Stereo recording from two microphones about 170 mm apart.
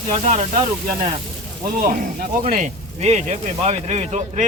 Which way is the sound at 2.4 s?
45° right (ahead or behind).